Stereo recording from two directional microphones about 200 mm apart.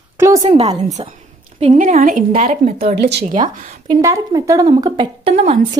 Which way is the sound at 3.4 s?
20° right (ahead or behind).